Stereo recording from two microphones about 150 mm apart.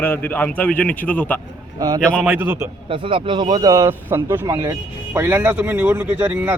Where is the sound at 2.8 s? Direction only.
35° right (ahead or behind).